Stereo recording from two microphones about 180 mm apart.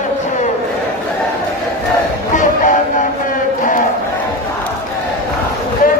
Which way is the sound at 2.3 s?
45° left (ahead or behind).